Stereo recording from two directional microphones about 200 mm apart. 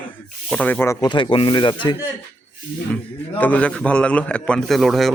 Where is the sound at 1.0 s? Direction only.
25° left (ahead or behind).